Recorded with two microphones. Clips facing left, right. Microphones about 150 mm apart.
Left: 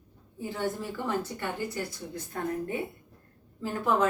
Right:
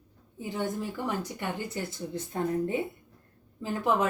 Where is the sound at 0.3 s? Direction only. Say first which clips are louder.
Even; 20° right (ahead or behind).